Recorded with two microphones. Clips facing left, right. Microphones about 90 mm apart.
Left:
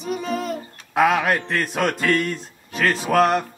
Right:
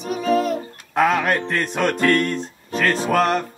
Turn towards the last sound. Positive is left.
turn(degrees=0)  # may be behind; listen again after turning